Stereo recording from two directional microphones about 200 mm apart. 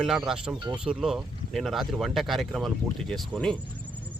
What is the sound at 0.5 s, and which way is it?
Speech, 20° right (ahead or behind).